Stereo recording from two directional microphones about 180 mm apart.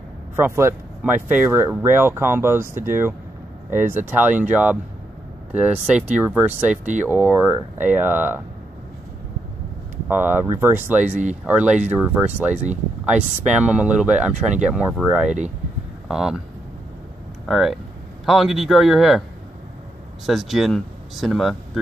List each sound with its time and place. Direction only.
0.4 s speech: 15° right (ahead or behind)
6.7 s speech: 40° right (ahead or behind)
7.0 s speech: 10° right (ahead or behind)
10.0 s speech: 10° right (ahead or behind)
17.5 s speech: centre (ahead or behind)
20.2 s speech: centre (ahead or behind)